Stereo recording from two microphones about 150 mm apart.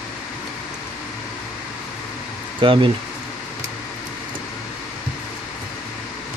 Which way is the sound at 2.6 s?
35° right (ahead or behind).